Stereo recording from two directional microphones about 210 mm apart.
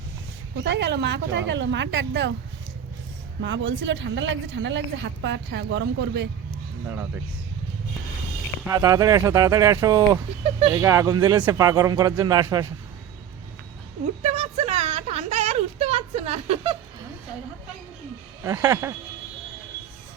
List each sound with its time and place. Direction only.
0.5 s a woman's voice: 55° right (ahead or behind)
3.4 s a woman's voice: 60° right (ahead or behind)
8.6 s speech: 15° right (ahead or behind)
14.2 s a sound: 30° right (ahead or behind)
18.4 s speech: 10° right (ahead or behind)